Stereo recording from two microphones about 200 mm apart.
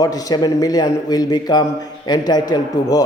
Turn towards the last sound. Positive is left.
turn(degrees=20)  # may be behind; listen again after turning